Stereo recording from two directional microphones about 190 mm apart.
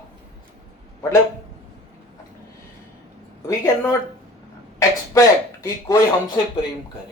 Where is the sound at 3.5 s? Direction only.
15° left (ahead or behind).